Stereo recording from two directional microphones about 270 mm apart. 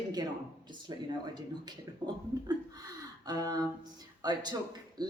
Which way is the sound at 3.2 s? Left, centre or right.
Centre.